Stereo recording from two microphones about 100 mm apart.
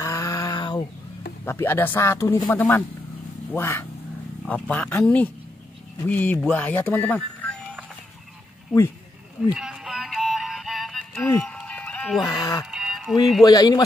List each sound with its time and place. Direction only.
0.0 s a sound: 35° left (ahead or behind)
1.4 s speech: 25° left (ahead or behind)
4.5 s speech: 15° left (ahead or behind)
9.4 s music: 5° right (ahead or behind)
11.1 s speech: 15° left (ahead or behind)
11.6 s music: 15° left (ahead or behind)
12.3 s speech: 35° left (ahead or behind)
12.7 s music: 5° right (ahead or behind)
13.4 s a man's voice: 40° left (ahead or behind)